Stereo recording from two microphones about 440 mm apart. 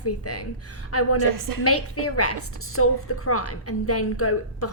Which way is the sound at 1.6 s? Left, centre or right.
Left.